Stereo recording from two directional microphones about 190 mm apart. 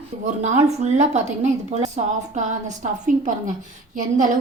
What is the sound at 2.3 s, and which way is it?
A woman's voice, 40° right (ahead or behind).